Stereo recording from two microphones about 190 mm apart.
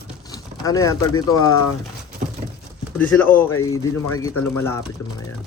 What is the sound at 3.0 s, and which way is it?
Speech, 10° left (ahead or behind).